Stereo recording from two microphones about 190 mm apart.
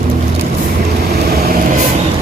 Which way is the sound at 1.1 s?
55° right (ahead or behind).